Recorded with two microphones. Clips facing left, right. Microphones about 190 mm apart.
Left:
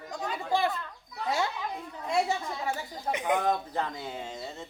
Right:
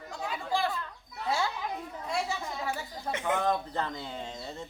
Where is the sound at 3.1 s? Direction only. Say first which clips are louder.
Left 2 dB; 15° left (ahead or behind).